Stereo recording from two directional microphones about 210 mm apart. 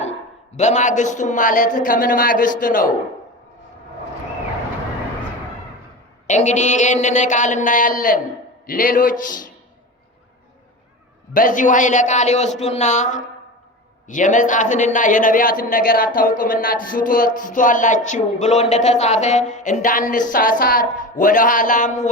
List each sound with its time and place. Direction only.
0.0 s a man's voice: 35° left (ahead or behind)
6.2 s a man's voice: 35° left (ahead or behind)
11.3 s a man's voice: 40° left (ahead or behind)